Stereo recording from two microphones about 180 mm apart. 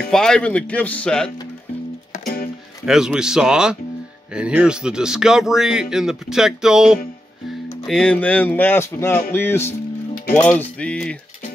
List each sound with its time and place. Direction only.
0.1 s speech: 5° left (ahead or behind)
2.1 s music: 55° left (ahead or behind)
2.8 s speech: 5° right (ahead or behind)